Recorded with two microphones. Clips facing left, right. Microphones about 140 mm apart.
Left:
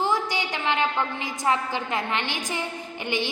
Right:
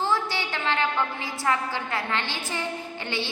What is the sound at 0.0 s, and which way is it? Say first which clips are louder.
A woman's voice: left 1 dB; 15° left (ahead or behind).